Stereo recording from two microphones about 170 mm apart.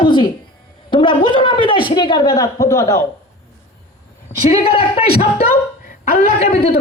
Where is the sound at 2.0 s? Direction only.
25° left (ahead or behind).